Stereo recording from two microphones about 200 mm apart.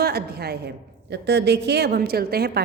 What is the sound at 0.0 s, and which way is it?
A woman's voice, 50° right (ahead or behind).